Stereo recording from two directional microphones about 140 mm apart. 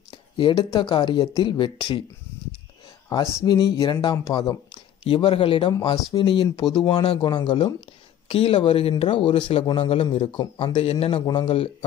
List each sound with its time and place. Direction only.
0.4 s speech: 35° left (ahead or behind)
3.1 s speech: 25° left (ahead or behind)
5.0 s speech: 40° left (ahead or behind)
8.3 s speech: 45° left (ahead or behind)
10.7 s speech: 45° left (ahead or behind)
11.1 s speech: 35° left (ahead or behind)